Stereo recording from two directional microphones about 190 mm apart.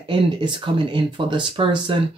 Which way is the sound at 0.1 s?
25° right (ahead or behind).